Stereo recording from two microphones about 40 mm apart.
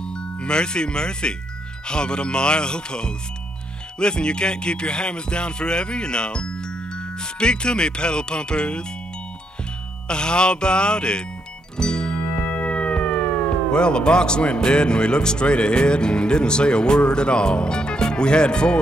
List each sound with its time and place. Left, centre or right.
0.0 s speech: left
10.0 s speech: left
11.7 s music: centre; by 13.3 s left
13.7 s speech: left